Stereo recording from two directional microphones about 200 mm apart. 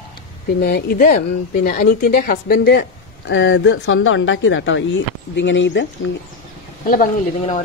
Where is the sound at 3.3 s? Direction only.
70° left (ahead or behind).